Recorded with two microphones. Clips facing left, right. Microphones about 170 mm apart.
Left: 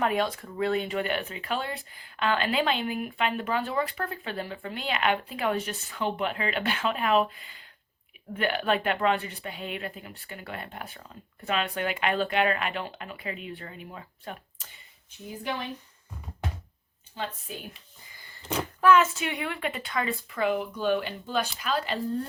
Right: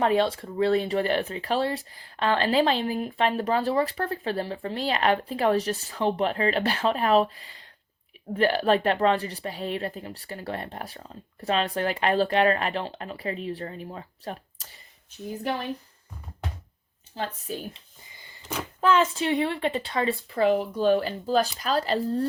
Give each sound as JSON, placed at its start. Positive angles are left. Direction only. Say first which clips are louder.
{"t": 0.0, "sound": "speech", "louder": "right 4 dB", "side_deg": -30}
{"t": 17.2, "sound": "speech", "louder": "right 3 dB", "side_deg": -35}
{"t": 17.7, "sound": "a sound", "louder": "right 1 dB", "side_deg": -20}
{"t": 18.8, "sound": "speech", "louder": "left 1 dB", "side_deg": -30}